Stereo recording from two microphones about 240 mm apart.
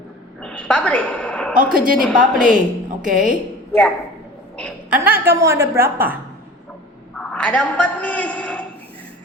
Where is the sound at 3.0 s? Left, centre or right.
Right.